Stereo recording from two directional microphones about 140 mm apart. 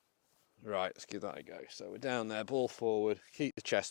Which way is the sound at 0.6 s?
20° left (ahead or behind).